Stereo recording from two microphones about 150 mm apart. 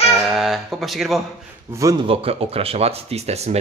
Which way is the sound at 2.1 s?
40° right (ahead or behind).